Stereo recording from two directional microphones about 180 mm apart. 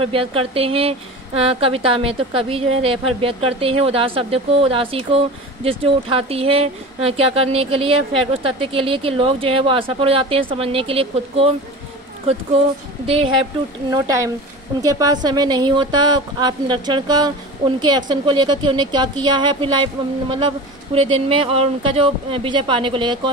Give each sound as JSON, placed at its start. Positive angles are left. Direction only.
{"t": 0.0, "sound": "speech", "side_deg": -30}
{"t": 13.8, "sound": "speech", "side_deg": -20}